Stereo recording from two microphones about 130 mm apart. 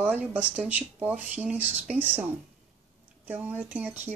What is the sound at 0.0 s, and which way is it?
Speech, 10° right (ahead or behind).